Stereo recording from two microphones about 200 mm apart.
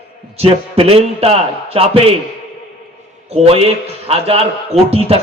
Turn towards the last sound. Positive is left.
turn(degrees=-30)  # may be behind; listen again after turning